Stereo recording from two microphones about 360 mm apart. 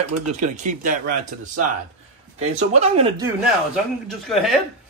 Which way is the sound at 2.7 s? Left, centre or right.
Centre.